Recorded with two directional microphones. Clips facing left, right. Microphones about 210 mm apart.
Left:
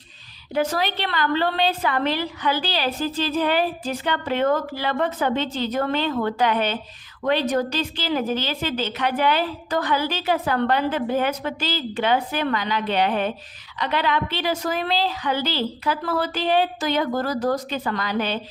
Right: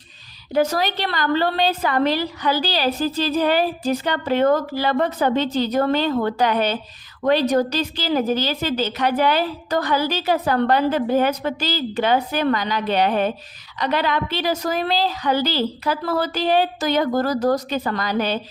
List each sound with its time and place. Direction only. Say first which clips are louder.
0.5 s a woman's voice: right 3 dB; 40° right (ahead or behind)